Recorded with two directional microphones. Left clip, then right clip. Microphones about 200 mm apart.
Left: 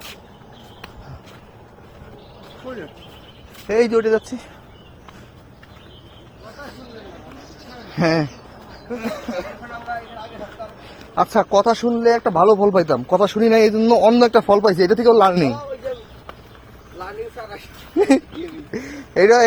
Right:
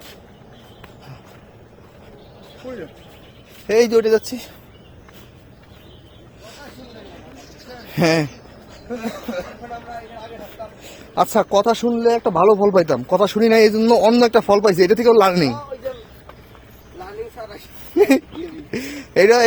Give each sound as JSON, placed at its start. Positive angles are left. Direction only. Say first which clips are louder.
{"t": 3.7, "sound": "speech", "louder": "right 2 dB", "side_deg": -70}
{"t": 7.9, "sound": "speech", "louder": "right 1 dB", "side_deg": -50}
{"t": 10.8, "sound": "a man's voice", "louder": "right 1 dB", "side_deg": -45}
{"t": 17.9, "sound": "owl", "louder": "right 1 dB", "side_deg": -40}
{"t": 18.8, "sound": "speech", "louder": "right 1 dB", "side_deg": -45}